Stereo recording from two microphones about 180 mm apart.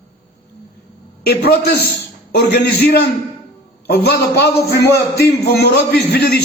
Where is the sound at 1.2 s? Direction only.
60° left (ahead or behind).